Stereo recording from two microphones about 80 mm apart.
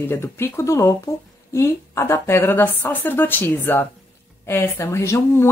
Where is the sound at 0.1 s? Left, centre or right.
Left.